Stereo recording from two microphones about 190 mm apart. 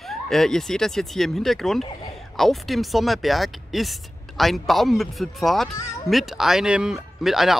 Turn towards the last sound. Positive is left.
turn(degrees=0)  # may be behind; listen again after turning